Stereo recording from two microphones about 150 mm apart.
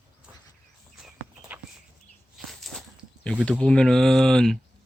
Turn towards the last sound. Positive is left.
turn(degrees=5)  # may be behind; listen again after turning